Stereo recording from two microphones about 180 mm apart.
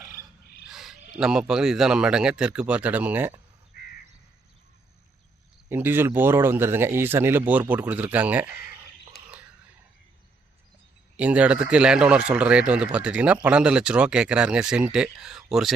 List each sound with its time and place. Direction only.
0.7 s a sound: centre (ahead or behind)
1.1 s speech: 5° right (ahead or behind)
3.7 s crow: 55° left (ahead or behind)
5.6 s speech: 10° right (ahead or behind)
11.2 s speech: 5° right (ahead or behind)